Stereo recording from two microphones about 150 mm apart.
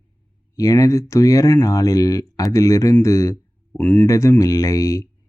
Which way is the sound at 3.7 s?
10° left (ahead or behind).